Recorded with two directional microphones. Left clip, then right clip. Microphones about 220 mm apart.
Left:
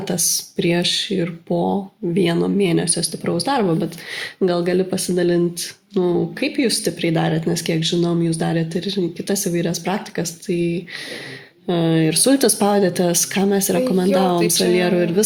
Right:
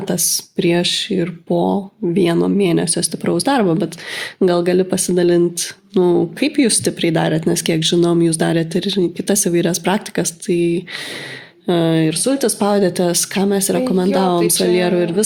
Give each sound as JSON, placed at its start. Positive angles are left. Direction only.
{"t": 0.1, "sound": "speech", "side_deg": -30}
{"t": 12.0, "sound": "speech", "side_deg": -5}
{"t": 12.5, "sound": "speech", "side_deg": -15}